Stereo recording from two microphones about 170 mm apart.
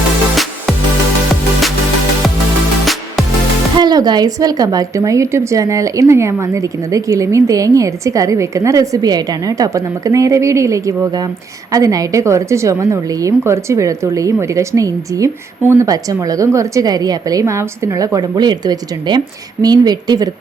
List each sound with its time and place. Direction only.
2.8 s music: centre (ahead or behind)
3.8 s a woman's voice: 25° right (ahead or behind)